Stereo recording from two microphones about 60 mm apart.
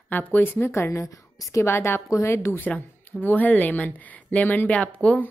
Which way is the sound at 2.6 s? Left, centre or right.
Left.